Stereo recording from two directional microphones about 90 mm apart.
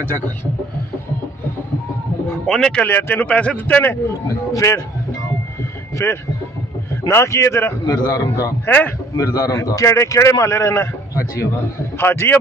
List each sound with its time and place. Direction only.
2.4 s speech: 5° left (ahead or behind)
2.8 s speech: 20° left (ahead or behind)
6.0 s a man's voice: 25° left (ahead or behind); by 8.5 s 40° left (ahead or behind)
8.6 s speech: 15° left (ahead or behind)
9.1 s a man's voice: 40° left (ahead or behind); by 12.4 s 25° left (ahead or behind)